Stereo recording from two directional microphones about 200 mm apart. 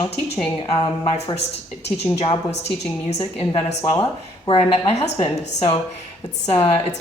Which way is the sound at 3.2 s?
25° left (ahead or behind).